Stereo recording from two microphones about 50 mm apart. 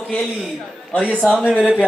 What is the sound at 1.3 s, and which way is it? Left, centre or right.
Speech, right.